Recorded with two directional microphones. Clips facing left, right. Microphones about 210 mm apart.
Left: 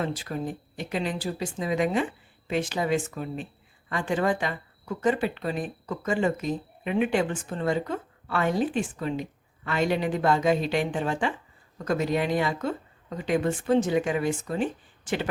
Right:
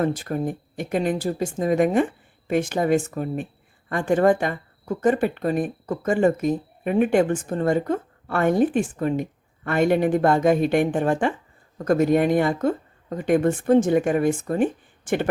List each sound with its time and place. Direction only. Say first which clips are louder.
0.0 s speech: right 6 dB; 50° right (ahead or behind)